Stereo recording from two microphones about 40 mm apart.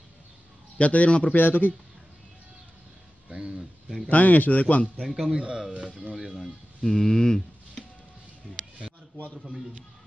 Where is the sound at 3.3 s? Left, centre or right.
Right.